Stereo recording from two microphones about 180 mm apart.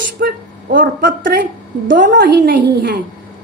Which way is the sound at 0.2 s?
50° right (ahead or behind).